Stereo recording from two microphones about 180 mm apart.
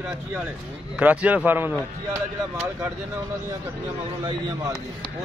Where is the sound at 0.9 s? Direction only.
10° right (ahead or behind).